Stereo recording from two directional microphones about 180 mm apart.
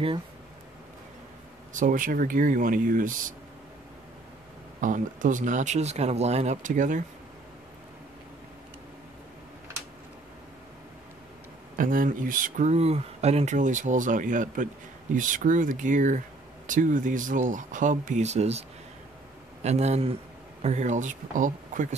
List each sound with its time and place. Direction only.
1.7 s speech: 45° right (ahead or behind)
4.7 s speech: 45° right (ahead or behind)
11.8 s speech: 50° right (ahead or behind)